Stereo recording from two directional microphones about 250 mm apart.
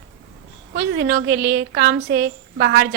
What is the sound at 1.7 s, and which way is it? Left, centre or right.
A woman's voice, right.